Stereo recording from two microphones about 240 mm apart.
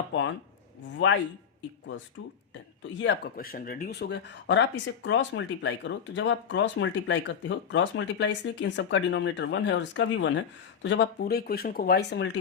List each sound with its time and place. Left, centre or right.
0.8 s speech: left
3.0 s speech: left